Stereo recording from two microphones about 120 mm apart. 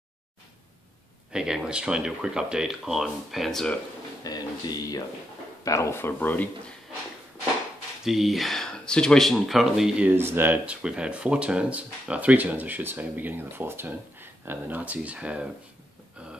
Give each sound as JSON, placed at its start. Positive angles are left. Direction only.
{"t": 1.3, "sound": "speech", "side_deg": -5}
{"t": 4.2, "sound": "speech", "side_deg": 35}
{"t": 8.0, "sound": "speech", "side_deg": -5}
{"t": 10.1, "sound": "speech", "side_deg": -20}